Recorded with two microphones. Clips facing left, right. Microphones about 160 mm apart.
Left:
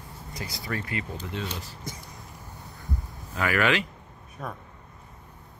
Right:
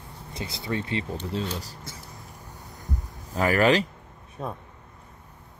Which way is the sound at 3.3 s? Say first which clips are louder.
Right 4 dB; 40° right (ahead or behind).